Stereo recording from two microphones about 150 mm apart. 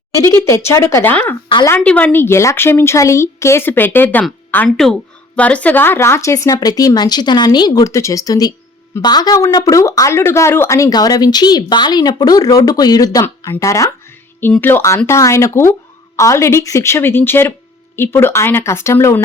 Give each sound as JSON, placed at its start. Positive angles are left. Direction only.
{"t": 0.1, "sound": "speech", "side_deg": 20}